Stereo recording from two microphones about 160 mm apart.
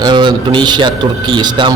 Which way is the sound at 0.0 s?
30° right (ahead or behind).